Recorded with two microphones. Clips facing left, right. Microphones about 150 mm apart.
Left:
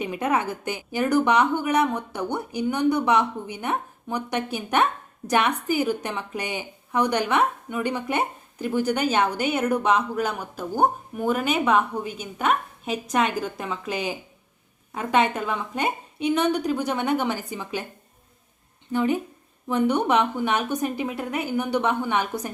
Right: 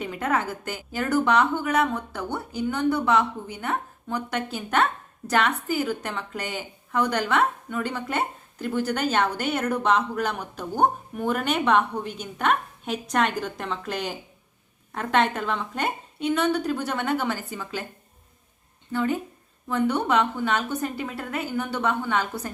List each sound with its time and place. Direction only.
0.0 s a woman's voice: 15° left (ahead or behind)
18.9 s a woman's voice: 15° left (ahead or behind)